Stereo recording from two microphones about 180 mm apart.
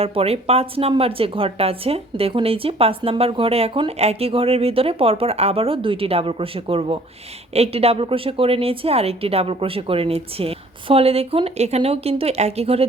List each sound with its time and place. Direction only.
0.0 s speech: 35° right (ahead or behind)